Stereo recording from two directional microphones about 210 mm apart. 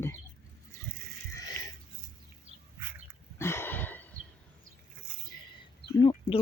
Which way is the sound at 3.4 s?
10° left (ahead or behind).